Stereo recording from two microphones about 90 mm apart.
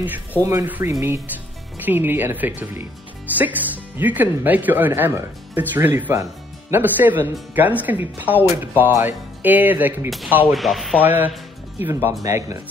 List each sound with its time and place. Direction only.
0.0 s speech: 20° right (ahead or behind)
0.4 s speech: 35° right (ahead or behind)
0.7 s speech: 20° right (ahead or behind)
10.0 s speech: centre (ahead or behind)
11.0 s speech: 20° right (ahead or behind)
11.9 s speech: 35° right (ahead or behind)